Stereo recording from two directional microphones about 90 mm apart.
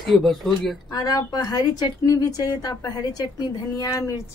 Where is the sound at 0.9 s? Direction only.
45° left (ahead or behind).